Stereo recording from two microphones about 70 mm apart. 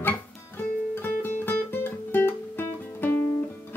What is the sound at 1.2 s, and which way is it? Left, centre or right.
Guitar, left.